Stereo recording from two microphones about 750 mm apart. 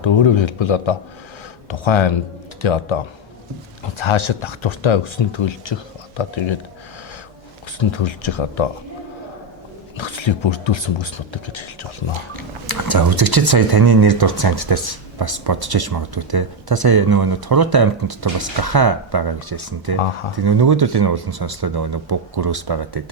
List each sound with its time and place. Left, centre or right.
0.0 s speech: left
7.8 s speech: left
10.0 s speech: left
12.4 s speech: right